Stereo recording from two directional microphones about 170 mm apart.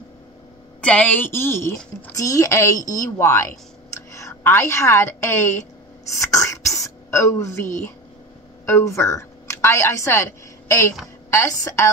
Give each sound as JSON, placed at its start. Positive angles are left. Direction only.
{"t": 0.7, "sound": "a woman's voice", "side_deg": 5}
{"t": 6.0, "sound": "throat clearing", "side_deg": 20}
{"t": 8.6, "sound": "a woman's voice", "side_deg": 15}